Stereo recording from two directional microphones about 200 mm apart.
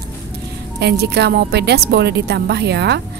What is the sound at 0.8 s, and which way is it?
A woman's voice, 55° right (ahead or behind).